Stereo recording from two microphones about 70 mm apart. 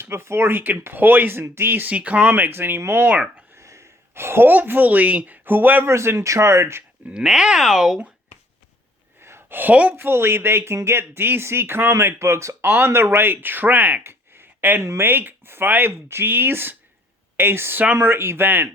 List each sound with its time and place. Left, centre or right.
0.0 s speech: right
3.5 s a woman's voice: right
5.9 s speech: right
7.1 s speech: centre
9.2 s a sound: right
9.9 s speech: right